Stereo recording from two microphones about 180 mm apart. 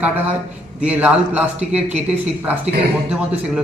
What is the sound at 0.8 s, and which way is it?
A man's voice, 5° right (ahead or behind).